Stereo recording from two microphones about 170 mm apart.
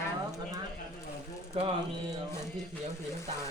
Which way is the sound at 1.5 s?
35° right (ahead or behind).